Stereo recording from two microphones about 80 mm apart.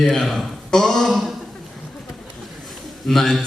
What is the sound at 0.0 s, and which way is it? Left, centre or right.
Speech, centre.